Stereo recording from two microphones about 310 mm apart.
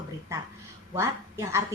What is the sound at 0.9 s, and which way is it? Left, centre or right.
Speech, centre.